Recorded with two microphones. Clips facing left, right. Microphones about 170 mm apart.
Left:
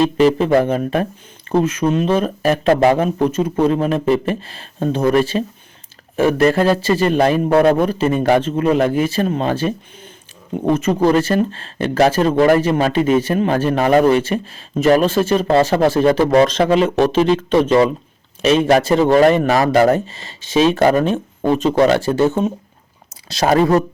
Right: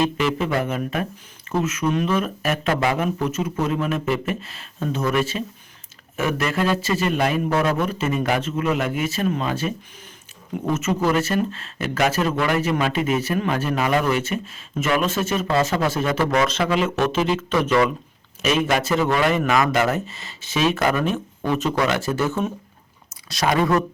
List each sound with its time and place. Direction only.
0.0 s speech: 35° left (ahead or behind)